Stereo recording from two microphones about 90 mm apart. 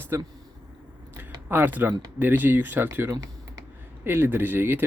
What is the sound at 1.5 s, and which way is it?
Speech, 20° right (ahead or behind).